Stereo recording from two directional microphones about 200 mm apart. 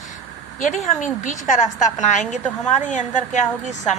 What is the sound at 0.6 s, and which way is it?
Speech, 40° left (ahead or behind).